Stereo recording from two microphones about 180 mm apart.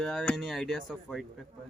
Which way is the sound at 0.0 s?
Centre (ahead or behind).